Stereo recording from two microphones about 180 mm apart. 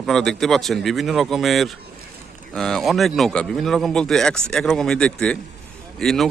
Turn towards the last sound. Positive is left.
turn(degrees=0)  # may be behind; listen again after turning